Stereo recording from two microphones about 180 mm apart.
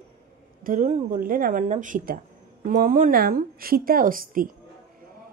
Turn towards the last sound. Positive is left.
turn(degrees=-50)  # may be behind; listen again after turning